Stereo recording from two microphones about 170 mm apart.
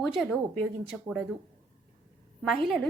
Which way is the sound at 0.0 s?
Centre (ahead or behind).